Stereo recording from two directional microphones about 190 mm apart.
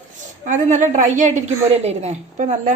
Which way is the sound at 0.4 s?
40° right (ahead or behind).